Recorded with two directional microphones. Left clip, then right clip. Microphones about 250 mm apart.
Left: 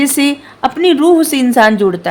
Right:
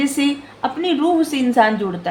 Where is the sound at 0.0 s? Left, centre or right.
Left.